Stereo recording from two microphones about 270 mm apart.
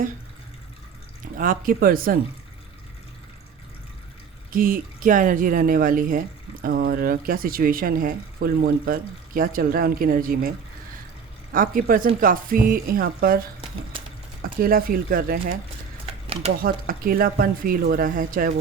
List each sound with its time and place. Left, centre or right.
1.2 s speech: right
4.5 s speech: right
11.5 s speech: right
14.6 s speech: right
16.2 s a sound: right
16.6 s speech: right